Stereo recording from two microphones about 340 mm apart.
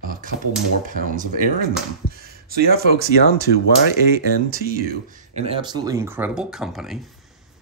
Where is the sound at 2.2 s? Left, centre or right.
Right.